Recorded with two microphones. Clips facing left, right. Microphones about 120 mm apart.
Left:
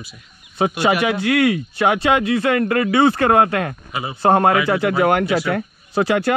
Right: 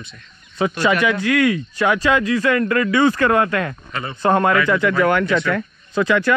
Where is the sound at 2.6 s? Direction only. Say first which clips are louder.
Left 1 dB; 30° left (ahead or behind).